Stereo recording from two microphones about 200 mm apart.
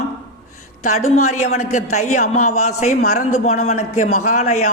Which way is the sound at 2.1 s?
35° left (ahead or behind).